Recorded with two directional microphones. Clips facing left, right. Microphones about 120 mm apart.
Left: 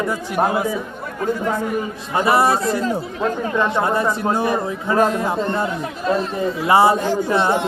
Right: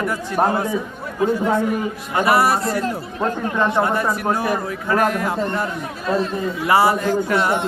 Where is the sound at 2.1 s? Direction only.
25° left (ahead or behind).